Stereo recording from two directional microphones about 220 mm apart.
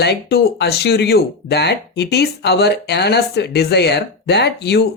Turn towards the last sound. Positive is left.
turn(degrees=50)  # may be behind; listen again after turning